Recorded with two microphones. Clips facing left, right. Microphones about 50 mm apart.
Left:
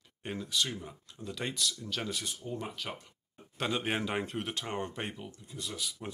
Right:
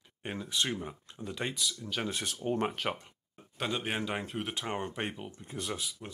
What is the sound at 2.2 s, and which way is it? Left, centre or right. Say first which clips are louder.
Speech: right 7 dB; right.